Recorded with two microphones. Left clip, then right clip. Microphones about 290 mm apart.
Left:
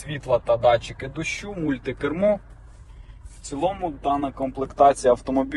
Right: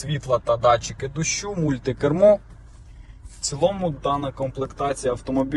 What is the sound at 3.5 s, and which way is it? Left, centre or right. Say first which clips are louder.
Speech: right 3 dB; centre.